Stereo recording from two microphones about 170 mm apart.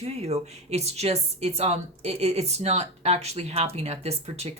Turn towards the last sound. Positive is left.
turn(degrees=-40)  # may be behind; listen again after turning